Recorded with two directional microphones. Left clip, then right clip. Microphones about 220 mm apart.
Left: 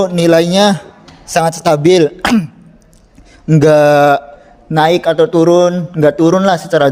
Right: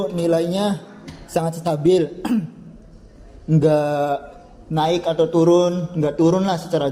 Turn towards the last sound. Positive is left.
turn(degrees=45)  # may be behind; listen again after turning